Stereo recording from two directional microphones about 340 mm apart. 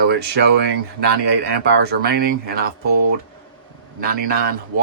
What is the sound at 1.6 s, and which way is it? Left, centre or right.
Speech, right.